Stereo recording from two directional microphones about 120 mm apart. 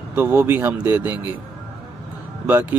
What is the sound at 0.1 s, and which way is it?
Speech, 15° right (ahead or behind).